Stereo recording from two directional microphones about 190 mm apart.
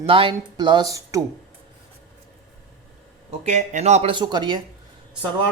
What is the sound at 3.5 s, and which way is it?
Speech, 40° right (ahead or behind).